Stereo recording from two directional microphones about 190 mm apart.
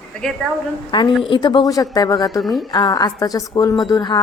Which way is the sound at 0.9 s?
25° left (ahead or behind).